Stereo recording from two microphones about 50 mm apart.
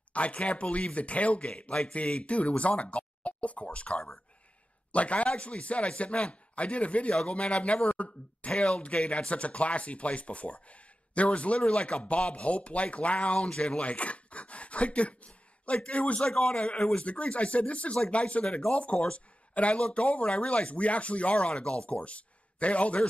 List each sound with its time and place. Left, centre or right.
0.1 s speech: left